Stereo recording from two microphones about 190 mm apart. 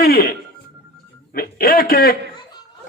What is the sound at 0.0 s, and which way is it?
Music, 50° left (ahead or behind).